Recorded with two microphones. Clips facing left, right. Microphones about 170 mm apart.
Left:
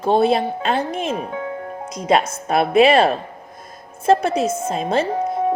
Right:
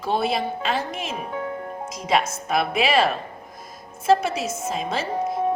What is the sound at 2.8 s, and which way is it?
Speech, 55° left (ahead or behind).